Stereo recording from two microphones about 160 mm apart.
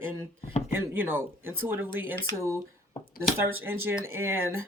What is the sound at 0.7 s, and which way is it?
Speech, 15° right (ahead or behind).